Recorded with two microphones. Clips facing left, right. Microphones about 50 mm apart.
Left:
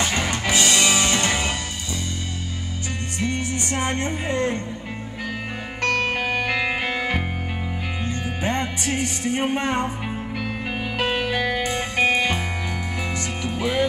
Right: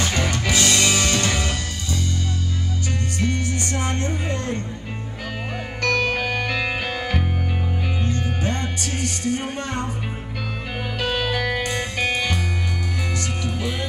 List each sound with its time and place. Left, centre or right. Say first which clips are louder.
0.0 s music: even; left
3.2 s music: left 1 dB; left
6.0 s music: even; centre
11.0 s music: even; left
13.4 s music: left 4 dB; left